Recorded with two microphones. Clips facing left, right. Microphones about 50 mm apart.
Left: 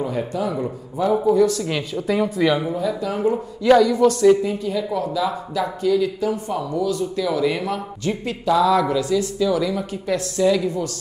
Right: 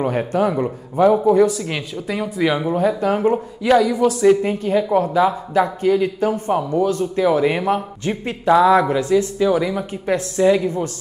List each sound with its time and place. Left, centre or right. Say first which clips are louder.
0.0 s speech: right 5 dB; right
1.6 s speech: left 1 dB; centre
2.7 s speech: right 5 dB; right
3.6 s speech: left 1 dB; centre
4.4 s speech: right 4 dB; right